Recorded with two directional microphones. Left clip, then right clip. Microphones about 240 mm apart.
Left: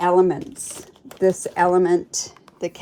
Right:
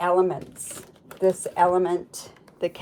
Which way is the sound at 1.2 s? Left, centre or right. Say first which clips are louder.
Left 2 dB; left.